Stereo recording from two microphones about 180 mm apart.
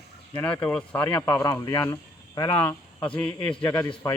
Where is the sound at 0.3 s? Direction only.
5° left (ahead or behind).